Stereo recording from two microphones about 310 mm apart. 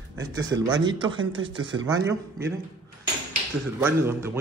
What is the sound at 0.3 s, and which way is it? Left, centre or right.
Speech, centre.